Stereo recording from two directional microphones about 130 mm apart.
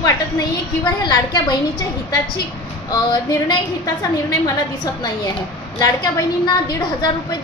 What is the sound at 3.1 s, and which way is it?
A woman's voice, 30° left (ahead or behind).